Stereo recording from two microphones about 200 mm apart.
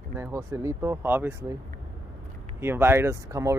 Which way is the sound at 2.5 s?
10° right (ahead or behind).